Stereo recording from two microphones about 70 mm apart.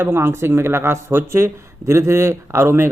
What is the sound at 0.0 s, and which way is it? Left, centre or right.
Speech, right.